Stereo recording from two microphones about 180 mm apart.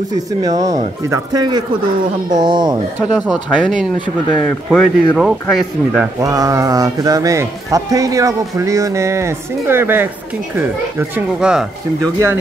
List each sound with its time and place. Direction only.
0.1 s speech: 20° right (ahead or behind)
3.0 s speech: 5° right (ahead or behind)
6.2 s speech: 20° right (ahead or behind)
12.0 s speech: 15° right (ahead or behind)